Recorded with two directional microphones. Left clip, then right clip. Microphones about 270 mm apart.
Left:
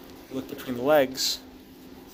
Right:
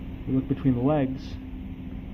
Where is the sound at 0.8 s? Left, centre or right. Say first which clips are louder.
Left 6 dB; left.